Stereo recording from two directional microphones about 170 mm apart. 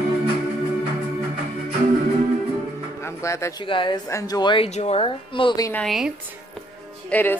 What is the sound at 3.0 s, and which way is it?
Music, 15° left (ahead or behind).